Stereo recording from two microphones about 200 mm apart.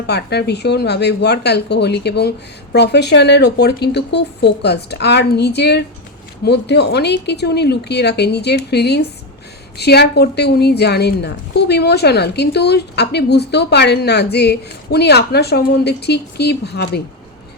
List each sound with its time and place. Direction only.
0.1 s a woman's voice: 55° left (ahead or behind)